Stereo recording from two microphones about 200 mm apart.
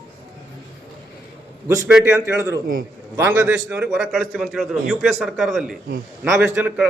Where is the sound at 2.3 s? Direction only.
20° right (ahead or behind).